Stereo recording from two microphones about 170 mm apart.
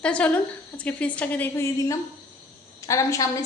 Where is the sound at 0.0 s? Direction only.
5° left (ahead or behind).